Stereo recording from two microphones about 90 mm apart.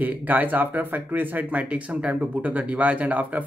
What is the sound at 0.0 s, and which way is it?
Speech, 20° right (ahead or behind).